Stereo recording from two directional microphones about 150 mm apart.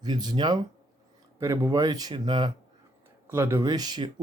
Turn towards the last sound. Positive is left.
turn(degrees=-25)  # may be behind; listen again after turning